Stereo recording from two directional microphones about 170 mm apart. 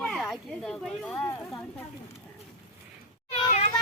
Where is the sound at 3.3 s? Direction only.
40° left (ahead or behind).